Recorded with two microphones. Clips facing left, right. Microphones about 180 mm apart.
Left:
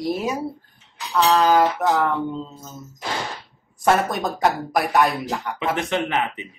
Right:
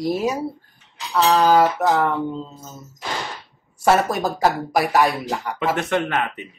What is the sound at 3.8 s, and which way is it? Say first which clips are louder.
A woman's voice: right 2 dB; 5° right (ahead or behind).